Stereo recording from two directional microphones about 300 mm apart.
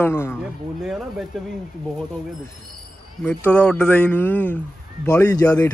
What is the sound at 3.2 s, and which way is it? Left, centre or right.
A man's voice, centre.